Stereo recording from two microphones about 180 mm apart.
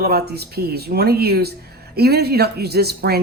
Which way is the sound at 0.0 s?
60° right (ahead or behind).